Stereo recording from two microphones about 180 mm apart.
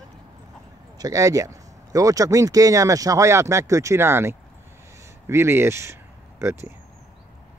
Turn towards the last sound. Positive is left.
turn(degrees=-15)  # may be behind; listen again after turning